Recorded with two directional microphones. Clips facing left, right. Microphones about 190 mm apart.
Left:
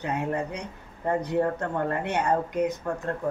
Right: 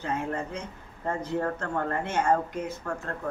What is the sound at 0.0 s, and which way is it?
Speech, 15° left (ahead or behind).